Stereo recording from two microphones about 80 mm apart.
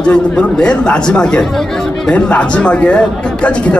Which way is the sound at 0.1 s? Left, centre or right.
Centre.